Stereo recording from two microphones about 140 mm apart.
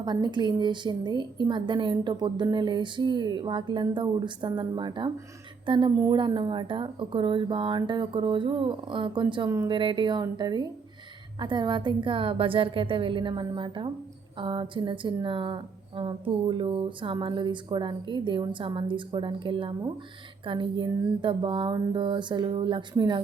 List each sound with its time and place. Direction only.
0.0 s speech: 30° right (ahead or behind)